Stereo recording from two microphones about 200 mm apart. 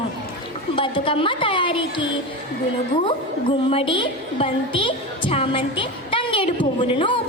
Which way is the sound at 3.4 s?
25° left (ahead or behind).